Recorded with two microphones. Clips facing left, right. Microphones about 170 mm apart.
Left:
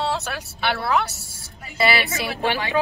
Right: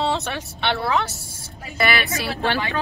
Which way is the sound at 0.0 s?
Centre (ahead or behind).